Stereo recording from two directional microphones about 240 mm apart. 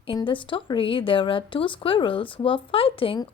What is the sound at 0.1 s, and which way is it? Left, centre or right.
Speech, left.